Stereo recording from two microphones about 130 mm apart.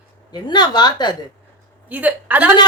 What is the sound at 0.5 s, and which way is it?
Speech, 35° left (ahead or behind).